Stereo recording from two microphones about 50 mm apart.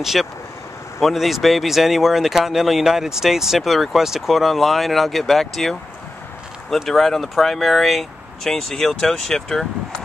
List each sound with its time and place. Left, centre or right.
0.0 s speech: centre